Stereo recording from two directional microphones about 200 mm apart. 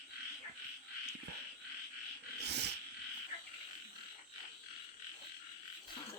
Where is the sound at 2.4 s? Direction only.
55° right (ahead or behind).